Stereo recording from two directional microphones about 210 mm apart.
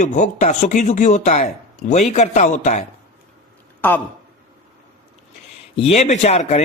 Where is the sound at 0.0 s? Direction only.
35° left (ahead or behind).